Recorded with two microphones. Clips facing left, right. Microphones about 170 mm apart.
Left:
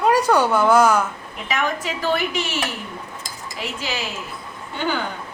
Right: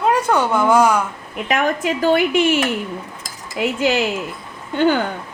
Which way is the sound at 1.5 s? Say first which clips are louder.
Right 5 dB; 50° right (ahead or behind).